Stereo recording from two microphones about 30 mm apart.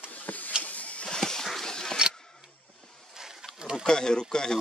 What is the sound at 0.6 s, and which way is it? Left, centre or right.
Vehicle, left.